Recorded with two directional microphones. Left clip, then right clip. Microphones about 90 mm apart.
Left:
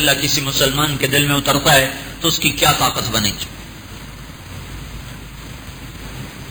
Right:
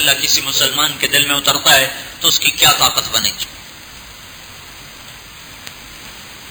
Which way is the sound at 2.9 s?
20° left (ahead or behind).